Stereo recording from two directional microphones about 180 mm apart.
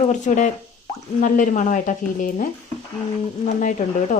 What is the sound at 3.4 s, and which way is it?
Speech, 45° left (ahead or behind).